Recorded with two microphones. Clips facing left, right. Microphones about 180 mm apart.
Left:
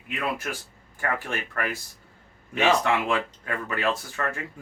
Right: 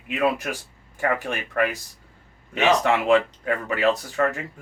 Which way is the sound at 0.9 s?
15° right (ahead or behind).